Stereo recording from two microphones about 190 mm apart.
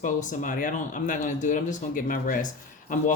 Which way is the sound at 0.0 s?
40° left (ahead or behind).